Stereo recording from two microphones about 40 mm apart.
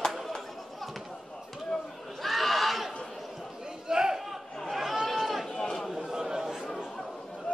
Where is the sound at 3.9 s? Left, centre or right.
Centre.